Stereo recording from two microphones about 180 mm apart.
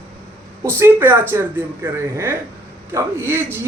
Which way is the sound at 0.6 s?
15° right (ahead or behind).